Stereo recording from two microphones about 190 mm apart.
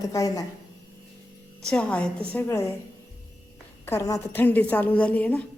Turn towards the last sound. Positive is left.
turn(degrees=10)  # may be behind; listen again after turning